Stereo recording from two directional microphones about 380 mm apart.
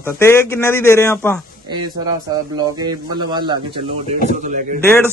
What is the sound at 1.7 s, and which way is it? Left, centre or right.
Speech, centre.